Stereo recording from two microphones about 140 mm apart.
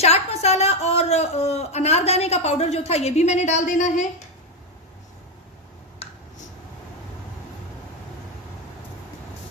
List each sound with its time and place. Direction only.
0.0 s a man's voice: 50° left (ahead or behind)